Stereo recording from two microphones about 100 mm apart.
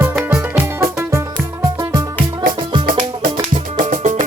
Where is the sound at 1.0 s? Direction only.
30° right (ahead or behind).